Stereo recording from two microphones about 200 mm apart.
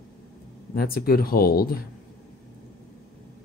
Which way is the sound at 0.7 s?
50° left (ahead or behind).